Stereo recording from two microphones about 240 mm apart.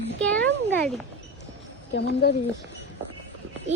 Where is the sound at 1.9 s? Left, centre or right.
Left.